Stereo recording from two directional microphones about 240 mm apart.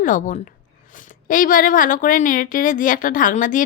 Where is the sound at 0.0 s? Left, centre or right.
Left.